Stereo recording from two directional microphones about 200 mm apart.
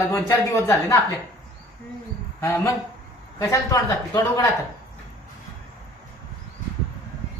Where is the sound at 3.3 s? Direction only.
15° left (ahead or behind).